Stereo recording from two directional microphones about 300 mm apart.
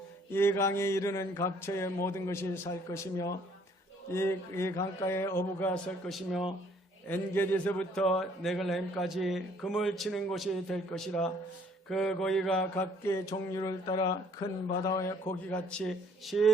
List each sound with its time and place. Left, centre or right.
0.3 s mantra: centre
7.1 s a man's voice: centre
11.9 s mantra: centre